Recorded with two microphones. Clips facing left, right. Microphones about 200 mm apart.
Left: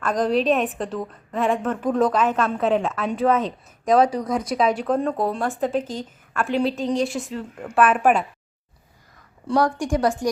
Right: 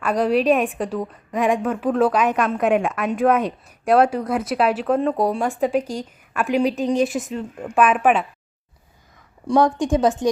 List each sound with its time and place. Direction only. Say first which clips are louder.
0.0 s a woman's voice: right 2 dB; 10° right (ahead or behind)
9.5 s a woman's voice: right 3 dB; 20° right (ahead or behind)